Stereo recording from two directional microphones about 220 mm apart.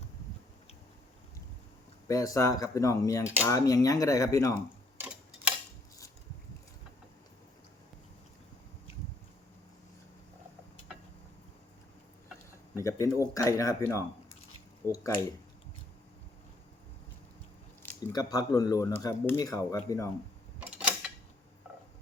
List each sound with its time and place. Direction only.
2.0 s speech: 15° left (ahead or behind)
4.9 s tick-tock: 5° right (ahead or behind)
12.8 s speech: 15° left (ahead or behind)
17.8 s speech: 15° left (ahead or behind)
20.6 s a sound: 5° right (ahead or behind)